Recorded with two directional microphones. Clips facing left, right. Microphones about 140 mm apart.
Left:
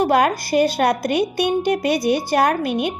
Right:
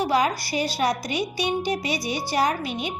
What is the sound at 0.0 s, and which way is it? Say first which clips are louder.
A woman's voice: left 5 dB; 55° left (ahead or behind).